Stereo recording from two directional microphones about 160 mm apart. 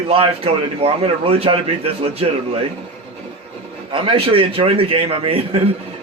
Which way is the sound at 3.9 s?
30° right (ahead or behind).